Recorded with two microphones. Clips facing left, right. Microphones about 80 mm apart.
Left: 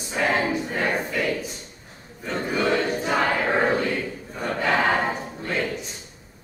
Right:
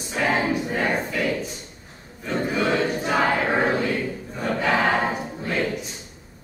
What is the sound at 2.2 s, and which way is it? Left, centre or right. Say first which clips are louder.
Choir: right 1 dB; centre.